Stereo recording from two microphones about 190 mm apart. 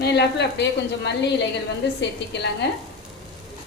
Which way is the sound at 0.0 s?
60° left (ahead or behind).